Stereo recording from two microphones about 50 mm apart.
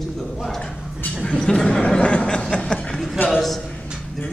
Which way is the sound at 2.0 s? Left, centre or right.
Left.